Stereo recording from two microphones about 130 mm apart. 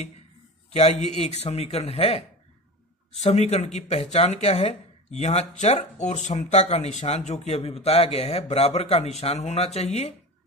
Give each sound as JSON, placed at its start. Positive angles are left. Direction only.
{"t": 0.7, "sound": "a man's voice", "side_deg": 55}